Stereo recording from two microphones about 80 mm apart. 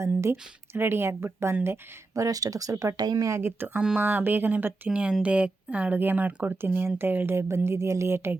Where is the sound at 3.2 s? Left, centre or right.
Right.